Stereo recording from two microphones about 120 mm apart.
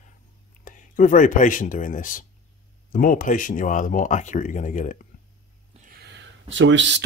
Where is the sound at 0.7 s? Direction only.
90° left.